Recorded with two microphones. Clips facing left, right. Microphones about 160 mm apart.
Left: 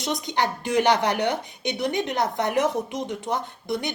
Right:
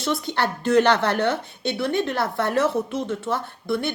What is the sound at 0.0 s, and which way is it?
Speech, 15° left (ahead or behind).